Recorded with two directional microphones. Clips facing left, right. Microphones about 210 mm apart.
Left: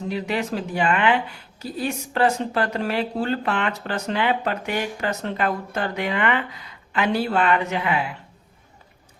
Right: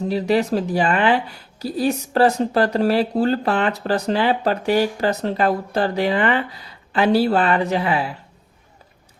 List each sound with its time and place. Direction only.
0.1 s speech: 35° right (ahead or behind)